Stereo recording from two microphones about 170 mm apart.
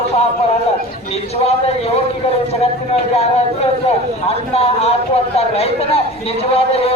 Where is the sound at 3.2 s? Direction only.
35° left (ahead or behind).